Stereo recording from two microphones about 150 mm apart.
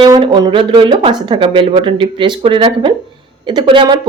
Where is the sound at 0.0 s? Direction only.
30° right (ahead or behind).